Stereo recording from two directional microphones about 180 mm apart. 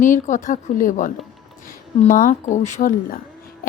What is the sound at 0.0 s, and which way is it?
Speech, 45° left (ahead or behind).